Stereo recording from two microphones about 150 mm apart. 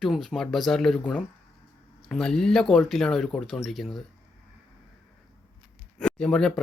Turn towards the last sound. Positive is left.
turn(degrees=5)  # may be behind; listen again after turning